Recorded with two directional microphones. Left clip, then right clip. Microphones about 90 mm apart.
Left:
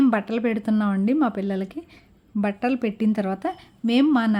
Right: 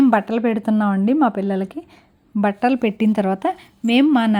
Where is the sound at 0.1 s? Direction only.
30° right (ahead or behind); by 3.6 s 45° right (ahead or behind).